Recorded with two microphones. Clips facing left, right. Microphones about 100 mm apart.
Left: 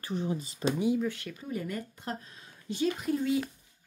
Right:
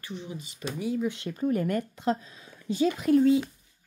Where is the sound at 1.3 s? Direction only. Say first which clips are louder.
Right 9 dB; 55° right (ahead or behind); by 2.2 s 90° right.